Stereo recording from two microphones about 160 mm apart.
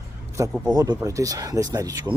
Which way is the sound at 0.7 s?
25° right (ahead or behind).